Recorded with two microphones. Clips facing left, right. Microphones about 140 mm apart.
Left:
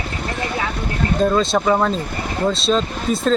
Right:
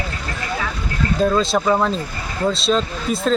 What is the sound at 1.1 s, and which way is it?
Speech, centre (ahead or behind).